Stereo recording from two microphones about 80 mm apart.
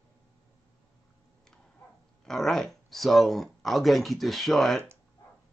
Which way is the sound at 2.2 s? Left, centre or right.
Centre.